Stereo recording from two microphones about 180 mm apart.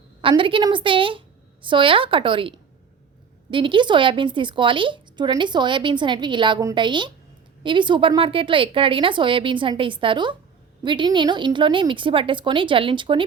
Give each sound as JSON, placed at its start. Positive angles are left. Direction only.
{"t": 0.2, "sound": "speech", "side_deg": -30}